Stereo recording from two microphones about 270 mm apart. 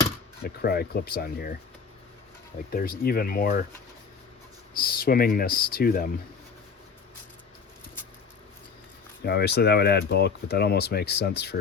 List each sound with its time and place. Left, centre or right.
0.4 s speech: left
2.7 s speech: left
4.8 s speech: left
9.2 s speech: left